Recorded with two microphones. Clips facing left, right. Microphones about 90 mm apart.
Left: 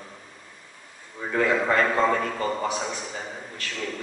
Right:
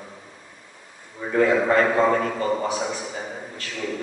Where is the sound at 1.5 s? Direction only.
15° right (ahead or behind).